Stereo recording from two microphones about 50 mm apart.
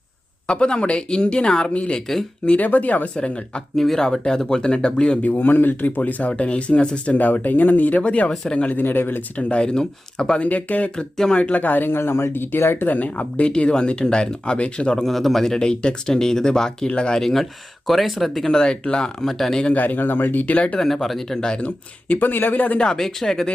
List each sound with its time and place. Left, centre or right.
0.4 s speech: centre
2.6 s speech: left
3.8 s speech: centre
5.2 s speech: left
9.4 s speech: left
10.5 s speech: left
12.9 s speech: left
15.0 s speech: centre
18.4 s speech: centre
19.7 s speech: left
20.7 s speech: centre
22.1 s speech: left
22.8 s speech: centre